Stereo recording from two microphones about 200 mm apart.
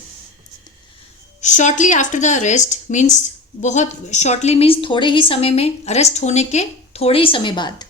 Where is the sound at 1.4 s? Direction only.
35° left (ahead or behind); by 7.8 s 20° left (ahead or behind).